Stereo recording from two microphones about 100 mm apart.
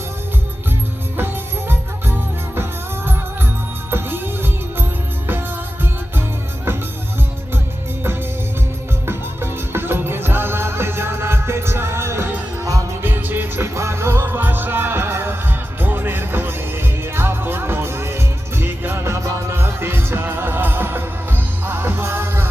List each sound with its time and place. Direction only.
1.1 s music: 20° right (ahead or behind)
3.9 s music: 20° right (ahead or behind)
9.0 s music: 25° right (ahead or behind)